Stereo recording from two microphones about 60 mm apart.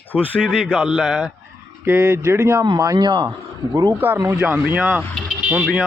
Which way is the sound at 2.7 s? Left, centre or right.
Right.